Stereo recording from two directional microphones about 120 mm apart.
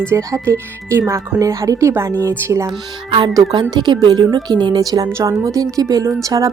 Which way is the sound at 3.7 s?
40° right (ahead or behind).